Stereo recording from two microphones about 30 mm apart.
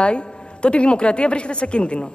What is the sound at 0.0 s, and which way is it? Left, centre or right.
A man's voice, left.